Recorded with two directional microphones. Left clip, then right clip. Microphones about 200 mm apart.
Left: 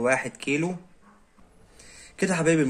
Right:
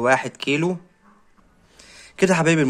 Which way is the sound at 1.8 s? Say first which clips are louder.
Right 8 dB; 45° right (ahead or behind).